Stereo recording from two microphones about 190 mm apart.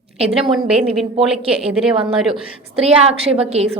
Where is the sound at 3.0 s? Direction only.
30° right (ahead or behind).